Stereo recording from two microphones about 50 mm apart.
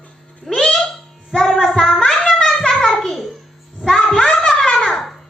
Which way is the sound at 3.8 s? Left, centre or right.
Centre.